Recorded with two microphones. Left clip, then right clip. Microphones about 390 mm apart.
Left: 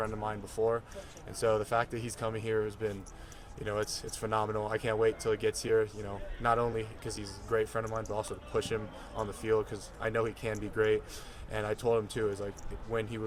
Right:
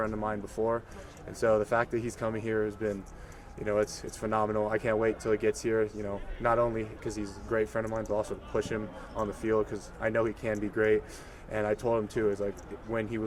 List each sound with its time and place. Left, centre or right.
0.0 s speech: left